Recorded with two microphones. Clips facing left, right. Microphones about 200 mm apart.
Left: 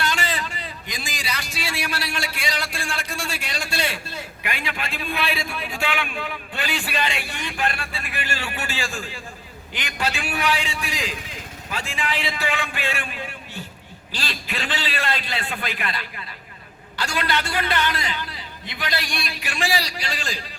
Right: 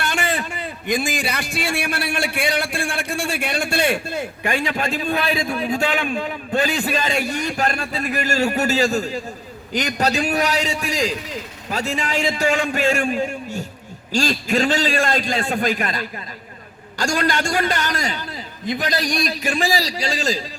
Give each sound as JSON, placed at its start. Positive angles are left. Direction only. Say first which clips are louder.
{"t": 0.1, "sound": "a man's voice", "louder": "right 4 dB", "side_deg": -55}